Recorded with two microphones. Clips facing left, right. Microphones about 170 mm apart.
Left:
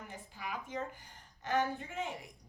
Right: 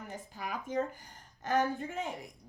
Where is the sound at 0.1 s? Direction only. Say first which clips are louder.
Right 4 dB; 40° right (ahead or behind).